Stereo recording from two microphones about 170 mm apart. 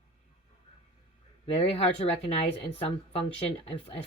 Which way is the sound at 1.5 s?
35° left (ahead or behind).